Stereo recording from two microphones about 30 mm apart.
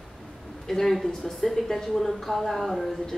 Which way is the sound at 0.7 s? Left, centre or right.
Centre.